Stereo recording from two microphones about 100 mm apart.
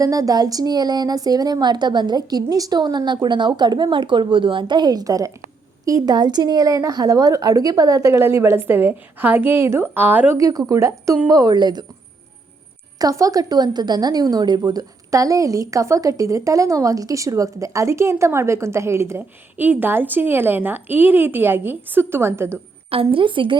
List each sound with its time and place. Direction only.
0.0 s a woman's voice: 35° right (ahead or behind); by 10.3 s 20° right (ahead or behind)
10.3 s a woman's voice: 35° right (ahead or behind)
13.0 s a woman's voice: 35° right (ahead or behind)
22.9 s a woman's voice: 65° right (ahead or behind)